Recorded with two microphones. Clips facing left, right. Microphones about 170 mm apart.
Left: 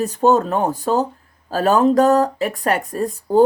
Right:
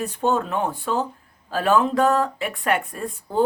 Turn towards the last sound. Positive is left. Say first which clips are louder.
# left 9 dB
turn(degrees=40)  # may be behind; listen again after turning